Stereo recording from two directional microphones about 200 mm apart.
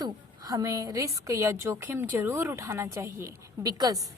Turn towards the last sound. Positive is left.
turn(degrees=-20)  # may be behind; listen again after turning